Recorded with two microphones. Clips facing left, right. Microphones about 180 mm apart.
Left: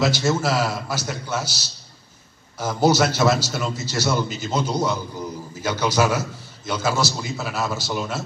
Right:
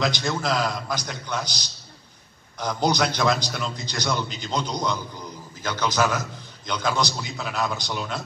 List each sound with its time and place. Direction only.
0.0 s a man's voice: 5° left (ahead or behind)